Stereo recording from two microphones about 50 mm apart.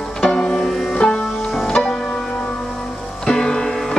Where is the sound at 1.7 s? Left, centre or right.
Left.